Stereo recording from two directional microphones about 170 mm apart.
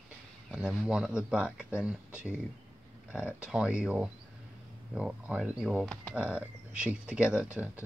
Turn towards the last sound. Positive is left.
turn(degrees=-10)  # may be behind; listen again after turning